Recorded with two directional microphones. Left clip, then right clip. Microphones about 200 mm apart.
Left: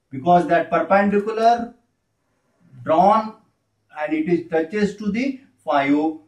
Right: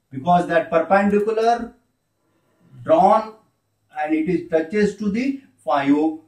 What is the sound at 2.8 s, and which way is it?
Speech, centre (ahead or behind).